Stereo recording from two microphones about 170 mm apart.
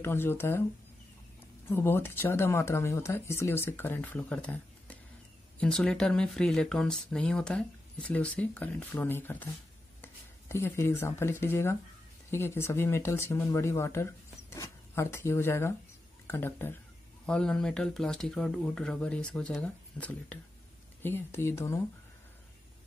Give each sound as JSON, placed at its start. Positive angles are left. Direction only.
{"t": 0.0, "sound": "speech", "side_deg": 15}
{"t": 1.7, "sound": "speech", "side_deg": 15}